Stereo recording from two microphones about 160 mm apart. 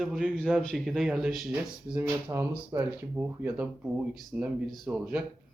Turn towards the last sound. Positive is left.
turn(degrees=-5)  # may be behind; listen again after turning